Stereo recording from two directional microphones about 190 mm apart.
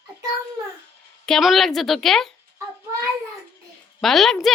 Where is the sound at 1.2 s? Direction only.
Centre (ahead or behind).